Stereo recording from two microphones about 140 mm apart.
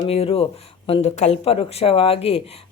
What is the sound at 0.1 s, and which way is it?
Speech, 45° left (ahead or behind).